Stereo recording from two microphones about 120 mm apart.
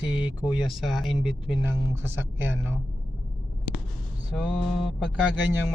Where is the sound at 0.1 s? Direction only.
10° right (ahead or behind).